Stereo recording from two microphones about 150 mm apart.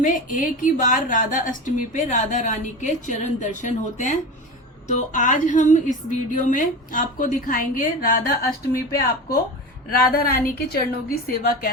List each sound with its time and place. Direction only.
0.0 s a woman's voice: 60° left (ahead or behind)
8.7 s speech: 80° left
10.1 s a woman's voice: 90° left
11.3 s speech: 75° left (ahead or behind)